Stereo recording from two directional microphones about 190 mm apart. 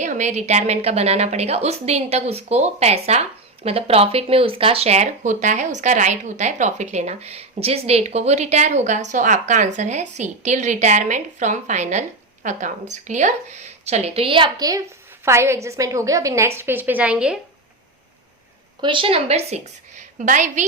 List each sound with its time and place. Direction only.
0.0 s a woman's voice: 40° right (ahead or behind); by 17.4 s 5° right (ahead or behind)
18.8 s a woman's voice: 25° right (ahead or behind); by 20.7 s 40° right (ahead or behind)